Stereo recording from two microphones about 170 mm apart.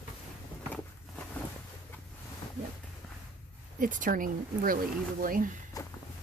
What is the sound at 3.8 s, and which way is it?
Speech, 50° right (ahead or behind).